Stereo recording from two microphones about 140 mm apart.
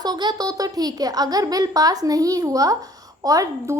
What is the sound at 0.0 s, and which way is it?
Speech, 30° right (ahead or behind).